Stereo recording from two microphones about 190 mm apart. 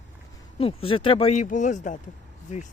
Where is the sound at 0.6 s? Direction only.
30° left (ahead or behind).